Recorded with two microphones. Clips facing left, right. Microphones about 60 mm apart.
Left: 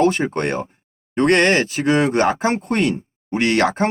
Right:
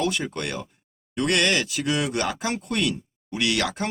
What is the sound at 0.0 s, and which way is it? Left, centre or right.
Speech, left.